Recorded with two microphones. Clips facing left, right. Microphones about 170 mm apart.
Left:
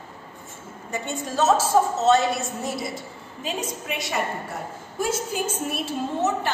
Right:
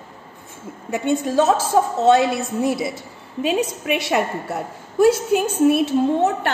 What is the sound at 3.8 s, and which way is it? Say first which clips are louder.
Speech: right 9 dB; 80° right.